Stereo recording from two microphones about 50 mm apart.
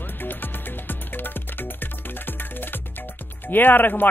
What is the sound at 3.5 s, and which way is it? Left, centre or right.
Speech, left.